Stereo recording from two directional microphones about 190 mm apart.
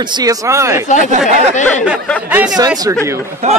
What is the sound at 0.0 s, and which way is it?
Speech, 20° right (ahead or behind).